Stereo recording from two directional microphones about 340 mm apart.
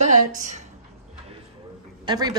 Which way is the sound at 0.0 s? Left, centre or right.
Right.